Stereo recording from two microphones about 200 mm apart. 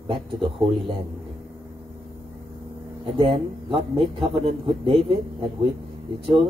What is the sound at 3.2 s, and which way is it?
Speech, 25° right (ahead or behind).